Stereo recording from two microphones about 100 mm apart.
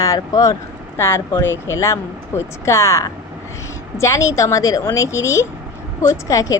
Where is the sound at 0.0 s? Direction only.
35° left (ahead or behind).